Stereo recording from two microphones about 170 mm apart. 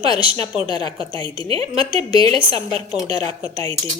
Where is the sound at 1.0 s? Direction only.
30° right (ahead or behind).